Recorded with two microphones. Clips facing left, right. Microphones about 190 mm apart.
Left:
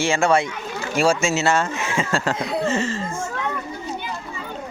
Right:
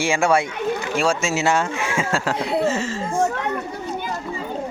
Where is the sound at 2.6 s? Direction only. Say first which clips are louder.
Even; 5° right (ahead or behind).